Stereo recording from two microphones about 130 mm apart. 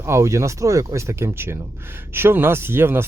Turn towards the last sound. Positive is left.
turn(degrees=-15)  # may be behind; listen again after turning